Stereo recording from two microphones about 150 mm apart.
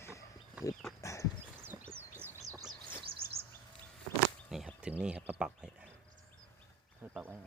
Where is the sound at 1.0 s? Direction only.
20° left (ahead or behind).